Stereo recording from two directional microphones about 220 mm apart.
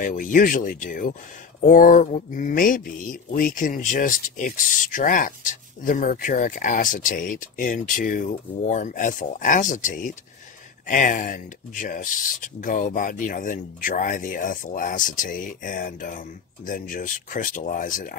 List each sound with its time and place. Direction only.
0.0 s speech: 40° left (ahead or behind)